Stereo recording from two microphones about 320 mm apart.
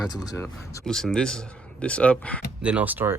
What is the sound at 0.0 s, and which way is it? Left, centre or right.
A man's voice, centre.